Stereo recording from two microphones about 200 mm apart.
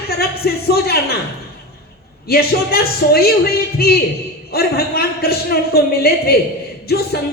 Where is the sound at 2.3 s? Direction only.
50° left (ahead or behind).